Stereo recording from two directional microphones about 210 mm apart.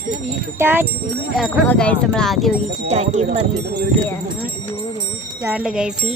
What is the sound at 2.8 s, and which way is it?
Speech, 35° right (ahead or behind).